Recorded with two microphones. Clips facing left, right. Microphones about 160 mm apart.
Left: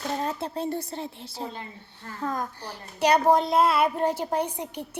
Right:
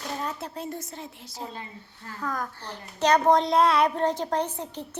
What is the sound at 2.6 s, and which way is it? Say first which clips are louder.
A woman's voice: left 1 dB; 10° left (ahead or behind).